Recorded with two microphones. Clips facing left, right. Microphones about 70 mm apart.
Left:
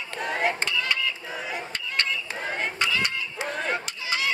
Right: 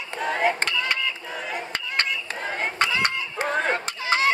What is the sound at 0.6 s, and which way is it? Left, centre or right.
Music, right.